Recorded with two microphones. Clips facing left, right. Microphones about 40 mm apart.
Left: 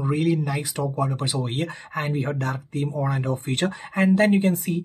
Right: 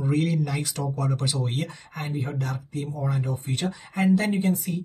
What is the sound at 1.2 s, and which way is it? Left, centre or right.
Speech, left.